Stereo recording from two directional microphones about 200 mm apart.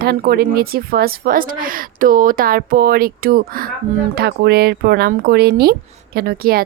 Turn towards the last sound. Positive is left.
turn(degrees=-50)  # may be behind; listen again after turning